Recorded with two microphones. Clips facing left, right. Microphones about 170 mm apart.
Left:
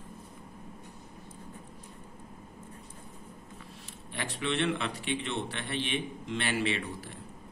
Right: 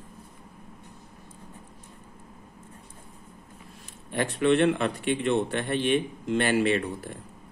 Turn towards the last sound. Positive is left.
turn(degrees=-45)  # may be behind; listen again after turning